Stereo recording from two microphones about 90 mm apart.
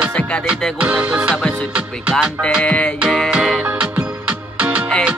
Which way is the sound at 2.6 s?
15° left (ahead or behind).